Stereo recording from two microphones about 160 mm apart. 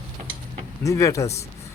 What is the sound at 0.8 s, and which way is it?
Speech, 20° left (ahead or behind).